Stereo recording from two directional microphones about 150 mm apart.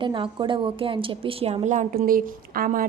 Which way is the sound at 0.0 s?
35° right (ahead or behind).